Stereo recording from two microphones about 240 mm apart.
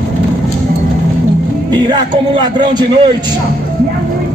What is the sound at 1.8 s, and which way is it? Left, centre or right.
A man's voice, centre.